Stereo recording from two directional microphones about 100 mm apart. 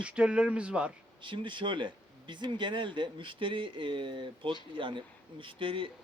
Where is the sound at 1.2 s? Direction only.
55° right (ahead or behind).